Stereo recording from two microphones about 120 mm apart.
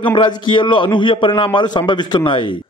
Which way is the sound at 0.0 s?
40° left (ahead or behind).